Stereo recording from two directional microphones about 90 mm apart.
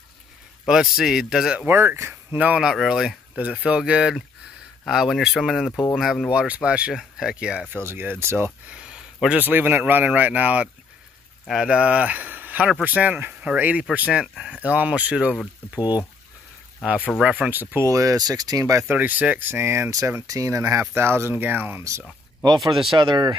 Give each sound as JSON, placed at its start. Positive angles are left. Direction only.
{"t": 0.7, "sound": "speech", "side_deg": -5}
{"t": 1.7, "sound": "speech", "side_deg": -25}
{"t": 6.3, "sound": "speech", "side_deg": -15}
{"t": 7.7, "sound": "speech", "side_deg": -25}
{"t": 8.6, "sound": "a sound", "side_deg": -10}
{"t": 9.3, "sound": "speech", "side_deg": -20}
{"t": 11.4, "sound": "speech", "side_deg": -5}
{"t": 14.2, "sound": "speech", "side_deg": 0}
{"t": 14.6, "sound": "speech", "side_deg": -15}
{"t": 15.8, "sound": "speech", "side_deg": 50}
{"t": 17.2, "sound": "speech", "side_deg": -10}
{"t": 17.8, "sound": "speech", "side_deg": -40}
{"t": 18.9, "sound": "speech", "side_deg": -20}
{"t": 22.7, "sound": "speech", "side_deg": -65}